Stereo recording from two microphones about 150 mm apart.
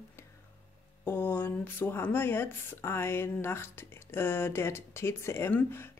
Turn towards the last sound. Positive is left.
turn(degrees=15)  # may be behind; listen again after turning